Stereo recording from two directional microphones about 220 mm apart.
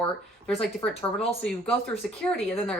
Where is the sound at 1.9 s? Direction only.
5° left (ahead or behind).